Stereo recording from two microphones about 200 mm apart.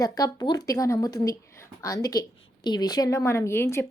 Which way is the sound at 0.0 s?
15° left (ahead or behind).